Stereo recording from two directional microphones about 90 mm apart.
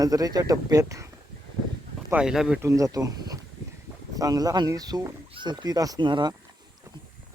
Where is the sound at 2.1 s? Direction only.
5° right (ahead or behind).